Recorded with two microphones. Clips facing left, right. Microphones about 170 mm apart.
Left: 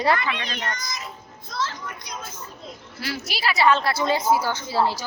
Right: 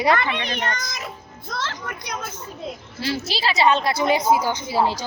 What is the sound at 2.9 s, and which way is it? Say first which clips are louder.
A woman's voice: right 4 dB; 25° right (ahead or behind).